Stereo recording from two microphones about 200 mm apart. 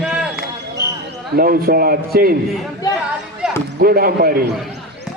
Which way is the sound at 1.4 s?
45° right (ahead or behind).